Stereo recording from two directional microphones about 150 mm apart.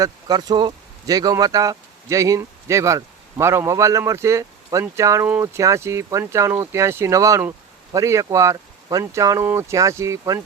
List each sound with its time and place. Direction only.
0.0 s speech: 25° right (ahead or behind)